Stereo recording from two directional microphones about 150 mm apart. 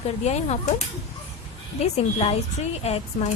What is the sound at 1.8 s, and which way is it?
Speech, 40° left (ahead or behind).